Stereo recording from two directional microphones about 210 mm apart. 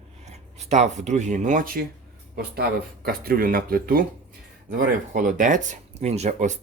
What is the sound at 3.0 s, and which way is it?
Speech, 45° right (ahead or behind).